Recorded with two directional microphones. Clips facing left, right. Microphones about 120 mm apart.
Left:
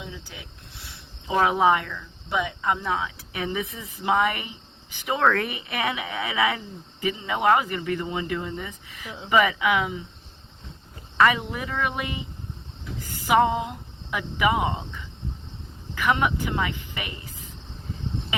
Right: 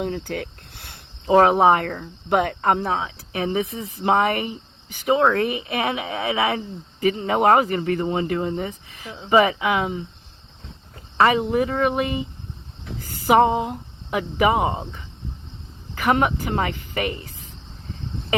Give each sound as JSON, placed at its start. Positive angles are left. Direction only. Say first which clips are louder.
{"t": 0.0, "sound": "speech", "louder": "right 13 dB", "side_deg": -60}
{"t": 1.3, "sound": "speech", "louder": "right 6 dB", "side_deg": -45}
{"t": 2.8, "sound": "speech", "louder": "right 3 dB", "side_deg": -35}
{"t": 5.1, "sound": "speech", "louder": "right 4 dB", "side_deg": -20}
{"t": 7.0, "sound": "speech", "louder": "right 5 dB", "side_deg": -50}
{"t": 11.2, "sound": "speech", "louder": "right 4 dB", "side_deg": -35}
{"t": 13.2, "sound": "speech", "louder": "right 4 dB", "side_deg": -35}
{"t": 16.0, "sound": "speech", "louder": "right 3 dB", "side_deg": -45}